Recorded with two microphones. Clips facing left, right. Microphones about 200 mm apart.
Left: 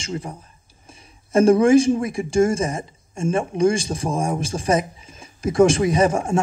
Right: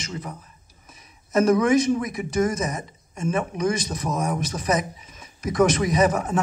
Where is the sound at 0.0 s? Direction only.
30° left (ahead or behind).